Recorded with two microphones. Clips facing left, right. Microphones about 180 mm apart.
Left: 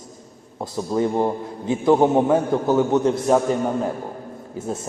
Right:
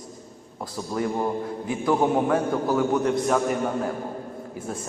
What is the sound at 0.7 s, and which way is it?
A man's voice, 25° left (ahead or behind).